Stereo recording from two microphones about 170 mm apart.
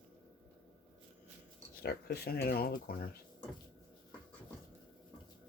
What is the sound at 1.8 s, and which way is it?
Speech, 65° left (ahead or behind).